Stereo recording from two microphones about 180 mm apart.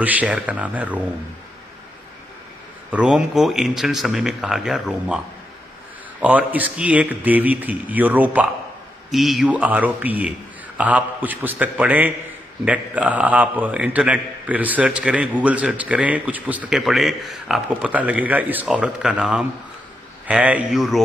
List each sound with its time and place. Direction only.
0.0 s a man's voice: 10° right (ahead or behind)
2.9 s speech: 5° right (ahead or behind)
6.2 s a man's voice: 10° right (ahead or behind)